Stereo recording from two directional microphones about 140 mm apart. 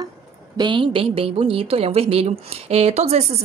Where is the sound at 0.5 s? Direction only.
35° right (ahead or behind).